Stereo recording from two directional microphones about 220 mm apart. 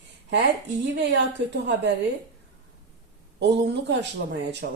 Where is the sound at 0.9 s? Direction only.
50° right (ahead or behind).